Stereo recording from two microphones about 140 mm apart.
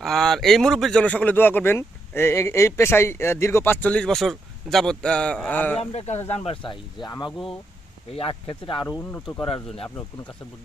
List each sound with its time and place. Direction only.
0.0 s speech: centre (ahead or behind)
5.8 s speech: 50° left (ahead or behind)
8.1 s speech: 40° left (ahead or behind)